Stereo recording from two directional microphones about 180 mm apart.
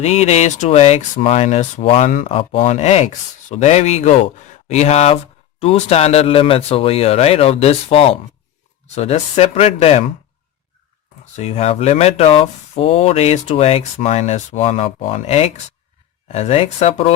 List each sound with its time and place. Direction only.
0.0 s speech: 35° left (ahead or behind)
11.3 s speech: 35° left (ahead or behind)